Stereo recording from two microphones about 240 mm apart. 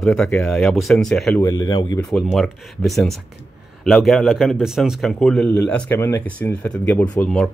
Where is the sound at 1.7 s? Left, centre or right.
Centre.